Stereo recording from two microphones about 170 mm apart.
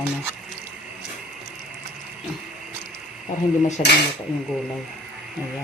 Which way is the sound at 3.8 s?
40° left (ahead or behind).